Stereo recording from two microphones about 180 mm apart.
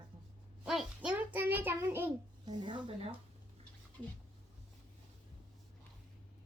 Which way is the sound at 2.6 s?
25° right (ahead or behind).